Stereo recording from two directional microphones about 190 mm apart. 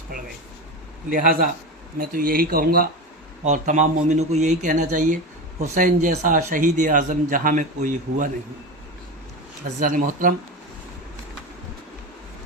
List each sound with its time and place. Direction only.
1.1 s speech: 45° right (ahead or behind)
3.4 s a man's voice: 40° right (ahead or behind)
9.8 s speech: 45° right (ahead or behind)